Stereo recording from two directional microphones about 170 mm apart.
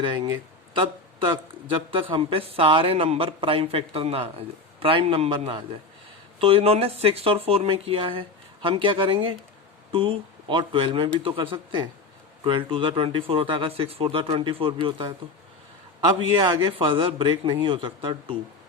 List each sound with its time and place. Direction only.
0.0 s speech: 30° right (ahead or behind)
0.7 s a sound: 30° right (ahead or behind)
1.7 s speech: 30° right (ahead or behind)
16.4 s speech: 30° right (ahead or behind)